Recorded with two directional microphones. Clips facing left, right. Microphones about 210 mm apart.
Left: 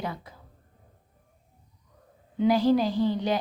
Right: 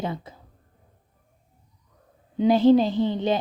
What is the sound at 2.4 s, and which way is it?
A woman's voice, 25° right (ahead or behind).